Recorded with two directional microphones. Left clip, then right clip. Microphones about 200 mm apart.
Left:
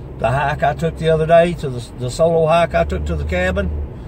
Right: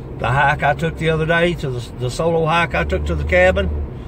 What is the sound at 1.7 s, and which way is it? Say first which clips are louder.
Speech: right 1 dB; 10° right (ahead or behind).